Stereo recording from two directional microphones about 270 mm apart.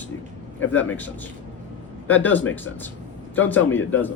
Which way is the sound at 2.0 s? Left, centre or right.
Centre.